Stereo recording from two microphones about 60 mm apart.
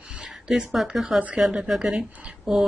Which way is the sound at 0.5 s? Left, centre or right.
Centre.